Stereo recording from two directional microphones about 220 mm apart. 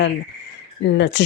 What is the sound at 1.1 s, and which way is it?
Speech, 55° left (ahead or behind).